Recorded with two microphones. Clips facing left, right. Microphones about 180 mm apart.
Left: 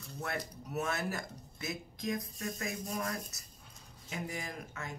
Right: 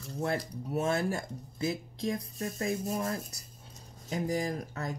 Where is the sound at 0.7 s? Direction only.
30° right (ahead or behind).